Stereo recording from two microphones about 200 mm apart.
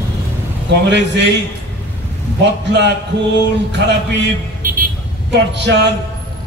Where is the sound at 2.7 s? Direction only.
60° right (ahead or behind).